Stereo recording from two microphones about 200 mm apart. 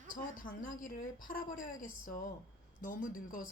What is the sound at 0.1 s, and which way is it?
A woman's voice, 40° left (ahead or behind).